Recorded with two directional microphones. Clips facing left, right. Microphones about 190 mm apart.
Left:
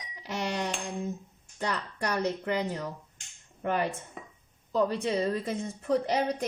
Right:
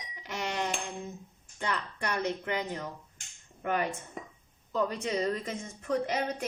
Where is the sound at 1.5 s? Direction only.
40° left (ahead or behind).